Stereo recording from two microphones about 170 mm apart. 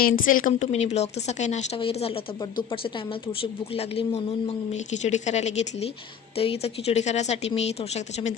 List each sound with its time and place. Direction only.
0.0 s a woman's voice: 55° left (ahead or behind)